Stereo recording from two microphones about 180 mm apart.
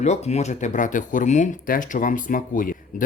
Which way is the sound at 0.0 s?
40° left (ahead or behind).